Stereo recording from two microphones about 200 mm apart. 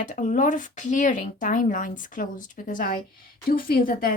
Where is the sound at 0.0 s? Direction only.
40° left (ahead or behind).